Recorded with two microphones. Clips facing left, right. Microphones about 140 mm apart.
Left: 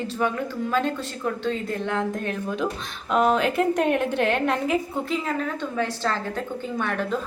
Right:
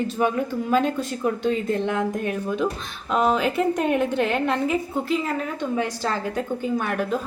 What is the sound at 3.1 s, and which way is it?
A woman's voice, centre (ahead or behind).